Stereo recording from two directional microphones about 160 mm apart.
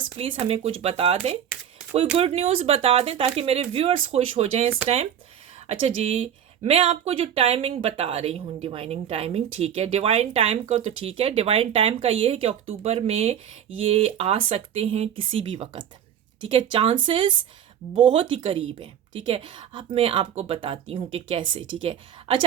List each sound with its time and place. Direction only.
0.2 s speech: 40° right (ahead or behind)